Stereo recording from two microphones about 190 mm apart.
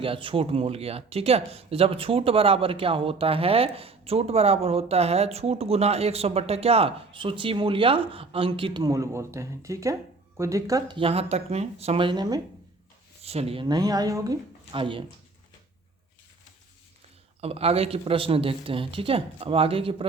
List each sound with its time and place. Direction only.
0.0 s speech: 30° right (ahead or behind)
13.2 s speech: 30° right (ahead or behind)
17.4 s speech: 30° right (ahead or behind)